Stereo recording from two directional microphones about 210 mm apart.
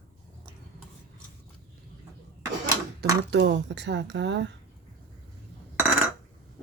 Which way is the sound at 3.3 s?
55° right (ahead or behind).